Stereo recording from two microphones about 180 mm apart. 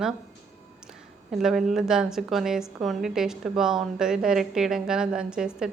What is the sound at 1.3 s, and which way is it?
A woman's voice, centre (ahead or behind).